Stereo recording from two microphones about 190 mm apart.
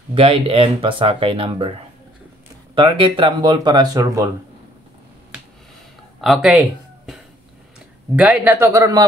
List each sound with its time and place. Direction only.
0.1 s speech: 30° right (ahead or behind)
6.2 s speech: 5° right (ahead or behind)
8.2 s speech: 10° right (ahead or behind)